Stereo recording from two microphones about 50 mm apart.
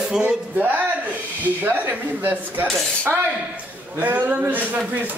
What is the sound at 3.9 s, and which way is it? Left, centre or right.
Speech, right.